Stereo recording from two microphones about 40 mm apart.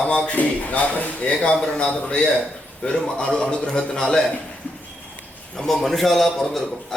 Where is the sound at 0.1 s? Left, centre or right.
Left.